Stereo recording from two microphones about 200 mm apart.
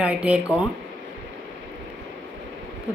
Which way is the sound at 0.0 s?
5° right (ahead or behind).